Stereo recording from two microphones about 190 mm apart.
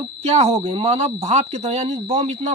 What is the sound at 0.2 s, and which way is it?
Speech, 35° right (ahead or behind).